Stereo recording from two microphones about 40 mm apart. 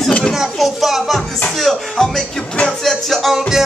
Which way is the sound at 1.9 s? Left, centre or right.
Centre.